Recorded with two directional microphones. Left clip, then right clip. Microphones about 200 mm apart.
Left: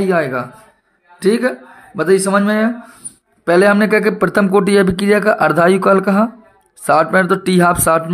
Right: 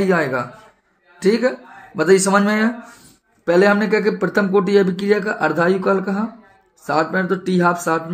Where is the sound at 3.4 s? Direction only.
30° left (ahead or behind).